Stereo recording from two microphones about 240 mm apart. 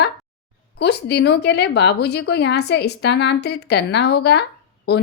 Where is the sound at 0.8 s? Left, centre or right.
Left.